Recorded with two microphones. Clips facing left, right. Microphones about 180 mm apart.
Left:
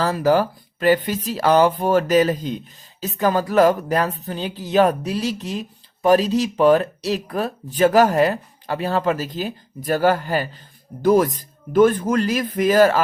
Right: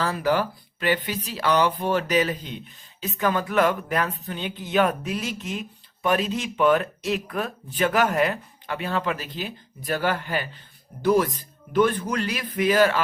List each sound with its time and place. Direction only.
0.0 s speech: 40° left (ahead or behind)